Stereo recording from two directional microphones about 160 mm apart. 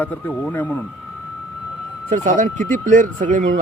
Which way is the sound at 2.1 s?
55° right (ahead or behind).